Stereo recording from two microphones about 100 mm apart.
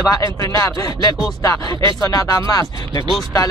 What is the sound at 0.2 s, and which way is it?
Speech, 30° left (ahead or behind).